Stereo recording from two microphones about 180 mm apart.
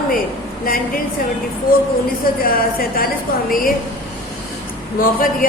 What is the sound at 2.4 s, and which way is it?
Speech, 55° left (ahead or behind).